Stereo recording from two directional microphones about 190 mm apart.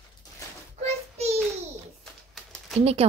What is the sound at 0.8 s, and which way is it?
Child singing, 35° right (ahead or behind).